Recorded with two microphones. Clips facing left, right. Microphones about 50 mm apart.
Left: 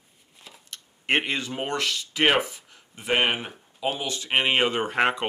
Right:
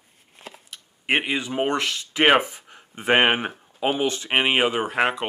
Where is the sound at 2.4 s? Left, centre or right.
Right.